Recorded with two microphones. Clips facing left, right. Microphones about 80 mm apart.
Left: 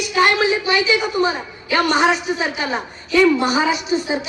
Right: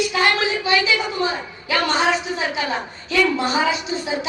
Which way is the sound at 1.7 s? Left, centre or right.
Centre.